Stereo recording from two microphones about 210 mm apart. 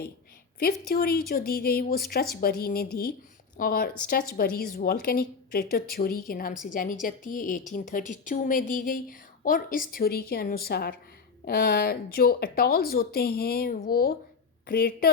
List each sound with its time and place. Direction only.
0.6 s a woman's voice: 45° left (ahead or behind)